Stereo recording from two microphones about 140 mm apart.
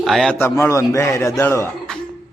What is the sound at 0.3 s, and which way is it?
A man's voice, 15° left (ahead or behind).